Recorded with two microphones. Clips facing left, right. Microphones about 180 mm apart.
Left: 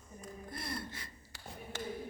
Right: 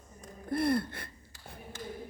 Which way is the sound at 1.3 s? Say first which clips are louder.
Left 2 dB; 75° left (ahead or behind).